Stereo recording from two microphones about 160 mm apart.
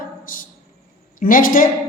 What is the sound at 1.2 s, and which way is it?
Speech, 60° left (ahead or behind).